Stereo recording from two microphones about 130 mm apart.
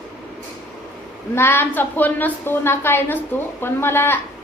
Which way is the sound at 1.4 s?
15° left (ahead or behind).